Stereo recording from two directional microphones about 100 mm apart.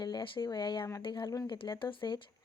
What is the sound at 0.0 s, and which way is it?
Speech, 50° left (ahead or behind).